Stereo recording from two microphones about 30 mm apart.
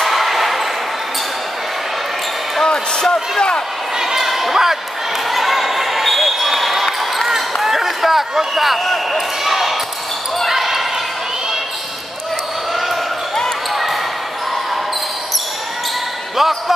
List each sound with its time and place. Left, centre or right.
0.0 s basketball bounce: centre
2.6 s speech: left
4.0 s basketball bounce: centre
16.3 s speech: centre